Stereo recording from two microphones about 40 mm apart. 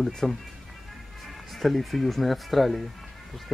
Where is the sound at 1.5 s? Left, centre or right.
Centre.